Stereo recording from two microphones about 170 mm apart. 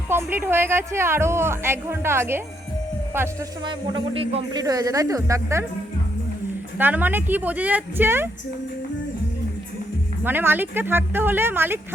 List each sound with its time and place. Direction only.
0.1 s a woman's voice: 15° right (ahead or behind)
3.7 s speech: 30° right (ahead or behind)
4.5 s speech: 20° right (ahead or behind)
6.7 s a woman's voice: 10° right (ahead or behind)
10.2 s a woman's voice: 10° right (ahead or behind)